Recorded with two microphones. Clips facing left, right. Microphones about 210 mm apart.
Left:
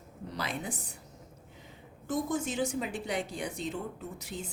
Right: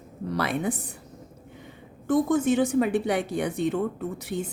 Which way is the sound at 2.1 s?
65° right (ahead or behind).